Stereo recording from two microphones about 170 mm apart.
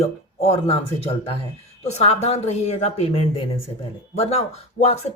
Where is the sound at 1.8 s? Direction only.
40° left (ahead or behind).